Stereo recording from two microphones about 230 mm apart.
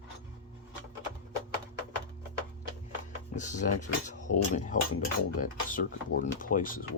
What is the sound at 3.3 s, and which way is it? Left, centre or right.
Speech, left.